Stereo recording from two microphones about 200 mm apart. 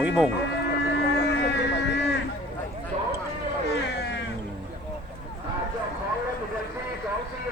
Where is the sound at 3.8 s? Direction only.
60° left (ahead or behind).